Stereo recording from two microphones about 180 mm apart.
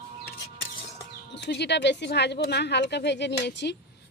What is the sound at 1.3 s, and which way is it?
Speech, 75° left (ahead or behind).